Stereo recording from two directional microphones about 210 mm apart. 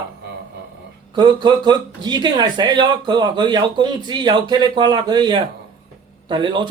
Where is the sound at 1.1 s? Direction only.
20° right (ahead or behind).